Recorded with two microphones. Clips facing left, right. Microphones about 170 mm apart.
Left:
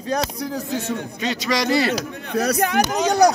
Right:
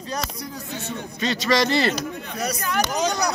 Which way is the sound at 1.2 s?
15° left (ahead or behind).